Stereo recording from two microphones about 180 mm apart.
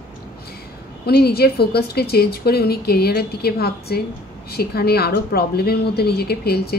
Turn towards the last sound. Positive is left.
turn(degrees=60)  # may be behind; listen again after turning